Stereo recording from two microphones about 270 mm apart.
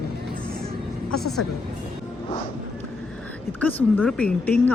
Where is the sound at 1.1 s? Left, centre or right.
Left.